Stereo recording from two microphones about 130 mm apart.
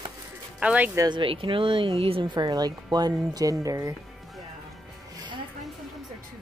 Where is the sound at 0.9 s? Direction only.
35° right (ahead or behind).